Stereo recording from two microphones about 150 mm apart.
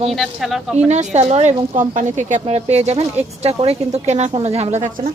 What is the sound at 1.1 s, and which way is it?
Speech, 45° right (ahead or behind).